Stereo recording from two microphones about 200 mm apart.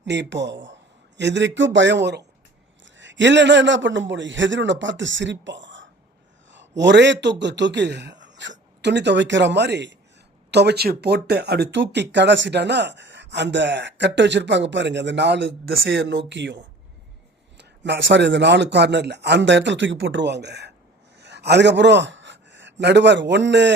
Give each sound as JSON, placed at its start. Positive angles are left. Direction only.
{"t": 0.0, "sound": "a man's voice", "side_deg": -60}